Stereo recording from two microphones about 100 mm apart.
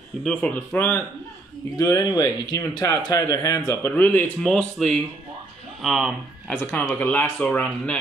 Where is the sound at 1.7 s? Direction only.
35° left (ahead or behind).